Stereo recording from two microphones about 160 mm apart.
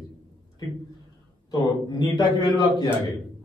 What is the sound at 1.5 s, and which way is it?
Speech, 25° left (ahead or behind).